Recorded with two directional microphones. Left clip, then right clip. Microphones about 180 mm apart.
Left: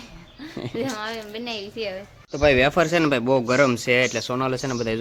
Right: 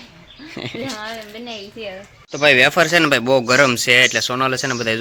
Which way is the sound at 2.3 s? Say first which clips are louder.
Right 5 dB; centre (ahead or behind).